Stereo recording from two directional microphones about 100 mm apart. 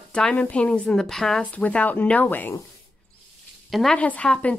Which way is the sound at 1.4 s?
15° left (ahead or behind).